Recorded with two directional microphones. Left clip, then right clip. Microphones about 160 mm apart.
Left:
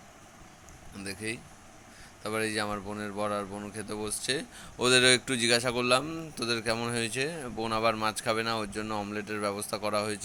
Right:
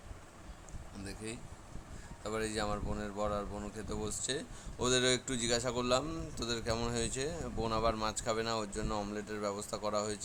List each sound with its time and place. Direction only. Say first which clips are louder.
0.9 s speech: left 8 dB; 20° left (ahead or behind)